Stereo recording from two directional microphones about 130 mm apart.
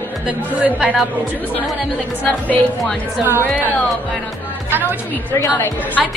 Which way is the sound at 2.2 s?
10° left (ahead or behind).